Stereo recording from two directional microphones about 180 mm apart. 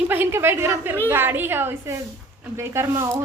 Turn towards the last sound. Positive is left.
turn(degrees=-15)  # may be behind; listen again after turning